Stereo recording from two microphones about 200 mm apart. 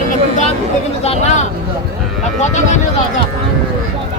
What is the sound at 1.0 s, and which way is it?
Speech, 35° left (ahead or behind).